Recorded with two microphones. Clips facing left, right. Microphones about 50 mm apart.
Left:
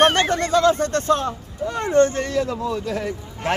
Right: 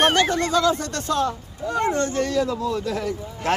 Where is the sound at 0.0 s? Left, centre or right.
Left.